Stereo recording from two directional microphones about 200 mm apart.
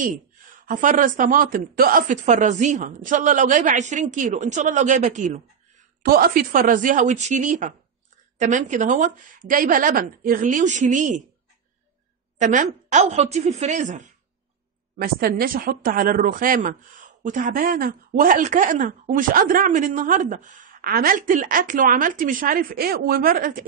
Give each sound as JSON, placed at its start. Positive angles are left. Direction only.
{"t": 0.7, "sound": "speech", "side_deg": -40}
{"t": 12.4, "sound": "speech", "side_deg": -40}
{"t": 15.0, "sound": "speech", "side_deg": -50}